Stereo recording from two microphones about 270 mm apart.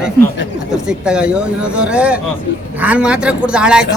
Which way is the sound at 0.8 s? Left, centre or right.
Centre.